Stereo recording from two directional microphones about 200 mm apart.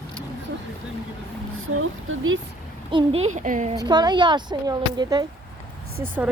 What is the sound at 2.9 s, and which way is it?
Speech, 30° right (ahead or behind).